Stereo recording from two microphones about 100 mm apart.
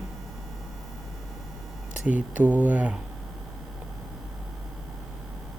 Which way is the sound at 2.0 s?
15° right (ahead or behind).